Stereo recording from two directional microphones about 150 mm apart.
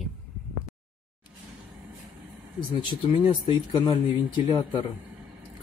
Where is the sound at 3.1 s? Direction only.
35° left (ahead or behind).